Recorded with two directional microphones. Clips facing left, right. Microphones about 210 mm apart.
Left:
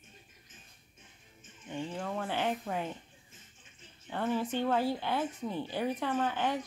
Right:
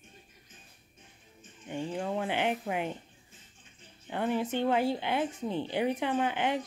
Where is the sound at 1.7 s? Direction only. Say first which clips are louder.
Right 3 dB; 25° right (ahead or behind).